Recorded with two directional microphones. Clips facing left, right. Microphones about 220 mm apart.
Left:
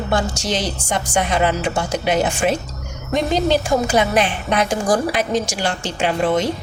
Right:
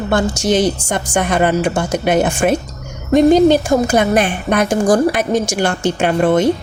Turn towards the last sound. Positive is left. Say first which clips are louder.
# right 5 dB
turn(degrees=-50)  # may be behind; listen again after turning